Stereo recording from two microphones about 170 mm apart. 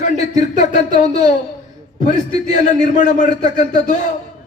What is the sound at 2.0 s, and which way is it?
A man's voice, 50° left (ahead or behind).